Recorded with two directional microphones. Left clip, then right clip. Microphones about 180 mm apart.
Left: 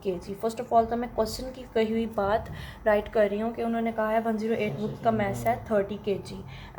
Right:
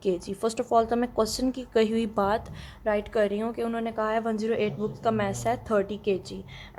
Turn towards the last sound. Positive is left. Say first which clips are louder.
# right 2 dB
turn(degrees=-55)  # may be behind; listen again after turning